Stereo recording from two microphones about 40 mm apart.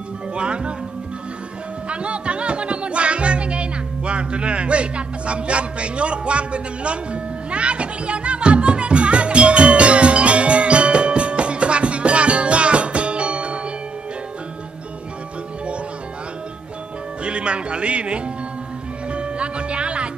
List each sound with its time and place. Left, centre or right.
0.3 s music: right
1.9 s music: right
17.2 s speech: right
19.1 s music: right